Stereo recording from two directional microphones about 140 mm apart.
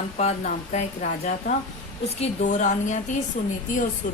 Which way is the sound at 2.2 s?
60° left (ahead or behind).